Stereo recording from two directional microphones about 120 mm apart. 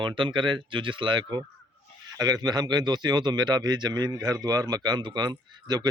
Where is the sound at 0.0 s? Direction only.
45° right (ahead or behind).